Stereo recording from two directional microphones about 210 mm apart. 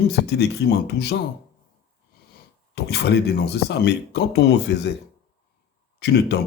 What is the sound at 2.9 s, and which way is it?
Speech, 50° left (ahead or behind).